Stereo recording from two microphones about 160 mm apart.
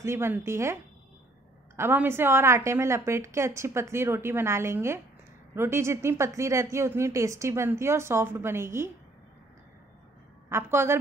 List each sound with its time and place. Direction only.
0.0 s speech: 15° right (ahead or behind)
1.8 s speech: 15° right (ahead or behind)
10.5 s speech: 15° right (ahead or behind)